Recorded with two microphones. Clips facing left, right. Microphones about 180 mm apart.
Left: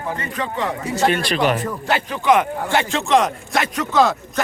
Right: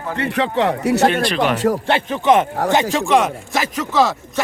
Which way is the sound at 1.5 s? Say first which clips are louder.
Right 8 dB; 80° right.